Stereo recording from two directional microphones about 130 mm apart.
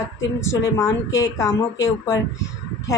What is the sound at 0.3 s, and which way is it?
Speech, 25° left (ahead or behind).